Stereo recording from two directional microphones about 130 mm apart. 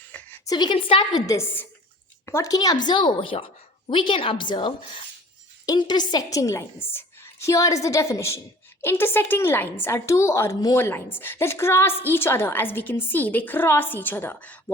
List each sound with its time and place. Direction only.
0.0 s a sound: 15° left (ahead or behind)
0.4 s a woman's voice: 35° left (ahead or behind)
1.3 s a woman's voice: 20° left (ahead or behind)